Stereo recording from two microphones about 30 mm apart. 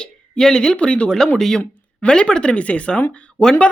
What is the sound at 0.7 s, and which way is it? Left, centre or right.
Speech, left.